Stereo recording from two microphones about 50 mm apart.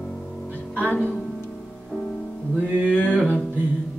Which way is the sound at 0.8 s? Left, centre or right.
Left.